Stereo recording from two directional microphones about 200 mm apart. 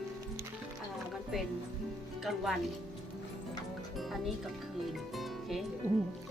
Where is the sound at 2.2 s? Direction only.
Centre (ahead or behind).